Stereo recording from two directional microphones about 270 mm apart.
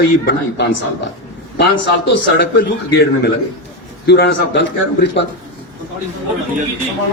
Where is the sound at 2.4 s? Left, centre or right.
Left.